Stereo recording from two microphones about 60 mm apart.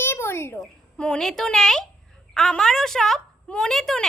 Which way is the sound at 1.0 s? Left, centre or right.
Centre.